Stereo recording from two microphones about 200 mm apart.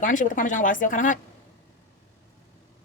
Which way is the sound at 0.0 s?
40° left (ahead or behind).